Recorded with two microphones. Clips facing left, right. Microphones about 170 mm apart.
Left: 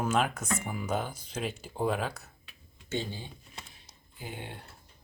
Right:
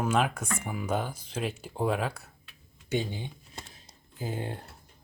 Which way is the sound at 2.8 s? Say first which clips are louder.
Right 4 dB; 15° right (ahead or behind).